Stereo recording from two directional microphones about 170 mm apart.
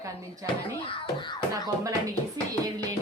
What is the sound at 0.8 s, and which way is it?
Wail, 30° left (ahead or behind).